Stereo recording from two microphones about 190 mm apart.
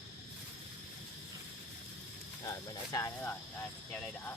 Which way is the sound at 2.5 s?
15° left (ahead or behind).